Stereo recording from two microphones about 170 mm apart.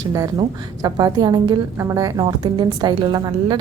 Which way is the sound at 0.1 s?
20° right (ahead or behind).